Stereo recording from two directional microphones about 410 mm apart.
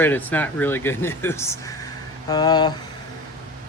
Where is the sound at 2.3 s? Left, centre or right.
Centre.